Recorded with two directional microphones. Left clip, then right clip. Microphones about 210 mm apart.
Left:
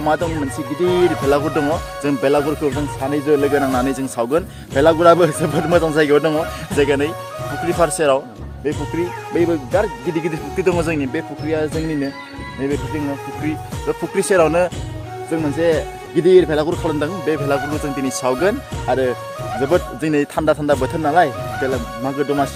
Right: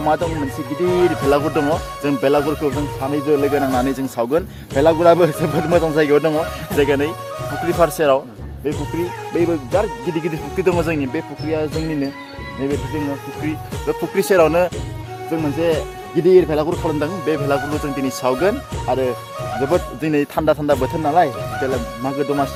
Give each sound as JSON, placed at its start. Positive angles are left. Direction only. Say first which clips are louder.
{"t": 0.0, "sound": "speech", "louder": "even", "side_deg": 0}
{"t": 6.7, "sound": "speech", "louder": "even", "side_deg": -10}
{"t": 8.6, "sound": "speech", "louder": "left 1 dB", "side_deg": 0}
{"t": 14.2, "sound": "speech", "louder": "even", "side_deg": -15}
{"t": 15.3, "sound": "speech", "louder": "left 2 dB", "side_deg": 0}